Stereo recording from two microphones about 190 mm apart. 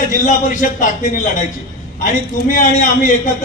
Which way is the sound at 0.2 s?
45° left (ahead or behind).